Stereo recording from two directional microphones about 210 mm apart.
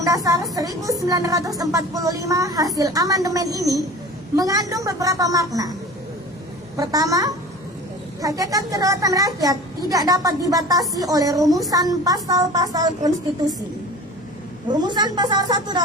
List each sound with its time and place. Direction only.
0.0 s a child's voice: 15° right (ahead or behind)
6.7 s a child's voice: 15° right (ahead or behind)
14.7 s a woman's voice: 20° right (ahead or behind)